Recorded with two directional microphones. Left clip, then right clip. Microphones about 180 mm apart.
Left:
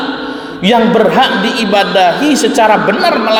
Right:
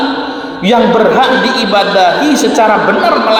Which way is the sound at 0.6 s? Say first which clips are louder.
Right 1 dB; 35° left (ahead or behind).